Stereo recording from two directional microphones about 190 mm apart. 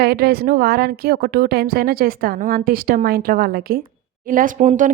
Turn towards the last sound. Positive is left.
turn(degrees=-40)  # may be behind; listen again after turning